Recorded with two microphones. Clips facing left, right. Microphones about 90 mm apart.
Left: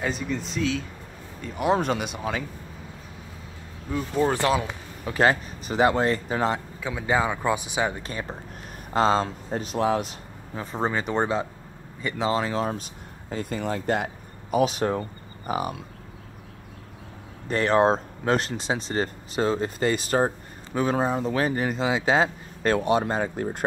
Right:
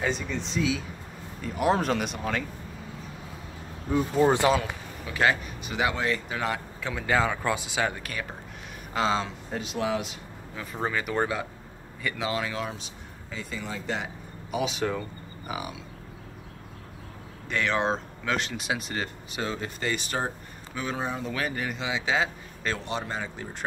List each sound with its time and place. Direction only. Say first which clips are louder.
0.0 s speech: left 1 dB; 5° left (ahead or behind)
3.9 s speech: right 2 dB; 15° right (ahead or behind)
5.0 s speech: left 4 dB; 40° left (ahead or behind)
6.8 s speech: even; 15° left (ahead or behind)
8.9 s speech: left 5 dB; 45° left (ahead or behind)
17.5 s speech: left 6 dB; 40° left (ahead or behind)